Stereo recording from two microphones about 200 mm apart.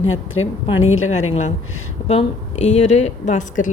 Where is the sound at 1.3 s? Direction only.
35° left (ahead or behind).